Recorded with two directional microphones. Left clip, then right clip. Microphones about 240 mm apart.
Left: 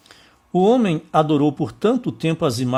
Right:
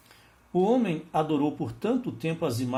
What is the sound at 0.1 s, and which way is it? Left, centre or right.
Speech, left.